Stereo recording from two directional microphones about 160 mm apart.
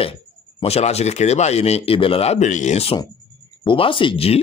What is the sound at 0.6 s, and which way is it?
Speech, 40° left (ahead or behind).